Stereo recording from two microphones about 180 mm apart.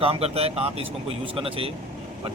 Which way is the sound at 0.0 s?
35° right (ahead or behind).